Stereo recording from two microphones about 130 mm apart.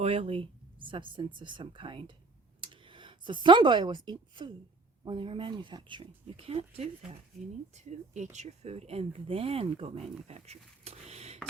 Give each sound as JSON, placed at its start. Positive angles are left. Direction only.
{"t": 0.0, "sound": "speech", "side_deg": -50}
{"t": 7.7, "sound": "speech", "side_deg": -60}
{"t": 10.2, "sound": "a sound", "side_deg": -55}